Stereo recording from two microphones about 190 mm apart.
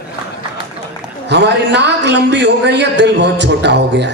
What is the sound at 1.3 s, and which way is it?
A man's voice, 65° right (ahead or behind).